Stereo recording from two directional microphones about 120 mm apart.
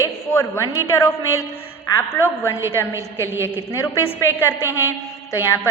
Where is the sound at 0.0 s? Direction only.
20° left (ahead or behind).